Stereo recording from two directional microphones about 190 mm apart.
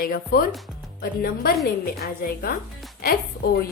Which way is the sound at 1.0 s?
55° left (ahead or behind).